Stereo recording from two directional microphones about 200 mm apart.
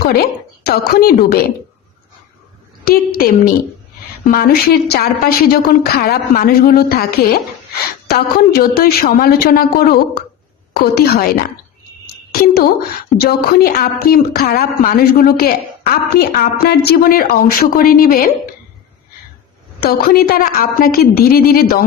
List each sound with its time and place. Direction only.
0.0 s speech: 50° left (ahead or behind)
2.8 s speech: 50° left (ahead or behind)
8.4 s speech: 50° left (ahead or behind)
12.0 s a sound: 50° left (ahead or behind)
13.5 s speech: 50° left (ahead or behind)
19.8 s speech: 50° left (ahead or behind)